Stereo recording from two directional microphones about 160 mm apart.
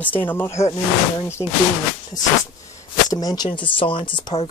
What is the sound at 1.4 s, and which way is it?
Speech, 30° left (ahead or behind).